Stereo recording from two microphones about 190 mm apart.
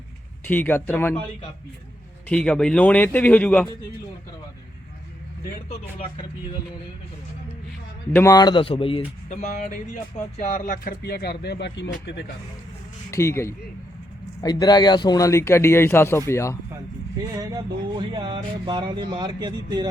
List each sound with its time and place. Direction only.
0.4 s speech: 10° left (ahead or behind)
2.3 s speech: 5° left (ahead or behind)
5.6 s speech: 30° left (ahead or behind)
8.1 s speech: 15° left (ahead or behind)
9.3 s speech: 40° left (ahead or behind); by 12.2 s 65° left (ahead or behind)
13.1 s speech: 15° left (ahead or behind)
17.3 s speech: 20° right (ahead or behind)